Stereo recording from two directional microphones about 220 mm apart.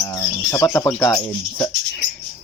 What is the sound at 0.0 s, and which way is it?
Speech, 15° left (ahead or behind).